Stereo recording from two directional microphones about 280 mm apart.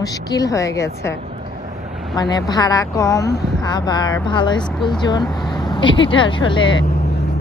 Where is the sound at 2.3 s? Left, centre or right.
Centre.